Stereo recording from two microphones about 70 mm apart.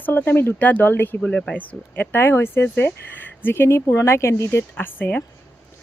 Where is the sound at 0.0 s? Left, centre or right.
Left.